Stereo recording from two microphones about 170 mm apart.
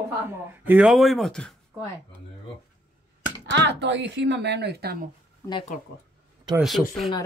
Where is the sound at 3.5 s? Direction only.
90° right; by 5.1 s 65° right (ahead or behind).